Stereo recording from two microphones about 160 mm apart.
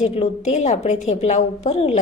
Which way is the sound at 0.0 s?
45° left (ahead or behind).